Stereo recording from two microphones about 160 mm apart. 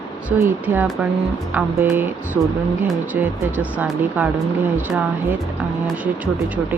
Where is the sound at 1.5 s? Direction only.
15° right (ahead or behind).